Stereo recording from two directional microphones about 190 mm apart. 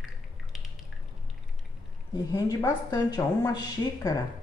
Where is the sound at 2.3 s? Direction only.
20° left (ahead or behind).